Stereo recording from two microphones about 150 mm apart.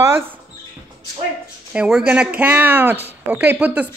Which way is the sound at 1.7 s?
5° right (ahead or behind).